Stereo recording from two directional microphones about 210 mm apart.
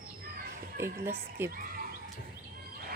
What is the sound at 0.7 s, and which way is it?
Speech, 10° right (ahead or behind).